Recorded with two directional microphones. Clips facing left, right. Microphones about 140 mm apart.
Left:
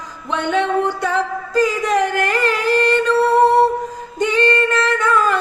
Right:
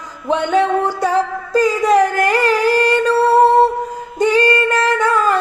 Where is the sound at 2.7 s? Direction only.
35° right (ahead or behind).